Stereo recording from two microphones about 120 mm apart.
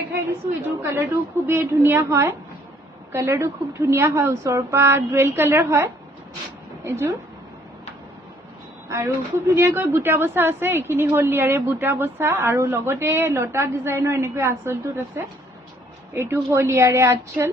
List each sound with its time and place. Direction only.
0.8 s a woman's voice: 20° right (ahead or behind)
8.8 s a woman's voice: 25° right (ahead or behind)